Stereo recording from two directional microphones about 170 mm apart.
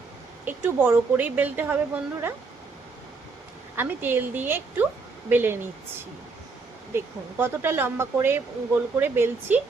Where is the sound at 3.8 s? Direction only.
10° right (ahead or behind).